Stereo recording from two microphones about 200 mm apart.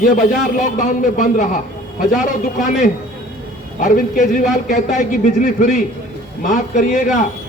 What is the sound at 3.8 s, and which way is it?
A man's voice, 40° left (ahead or behind).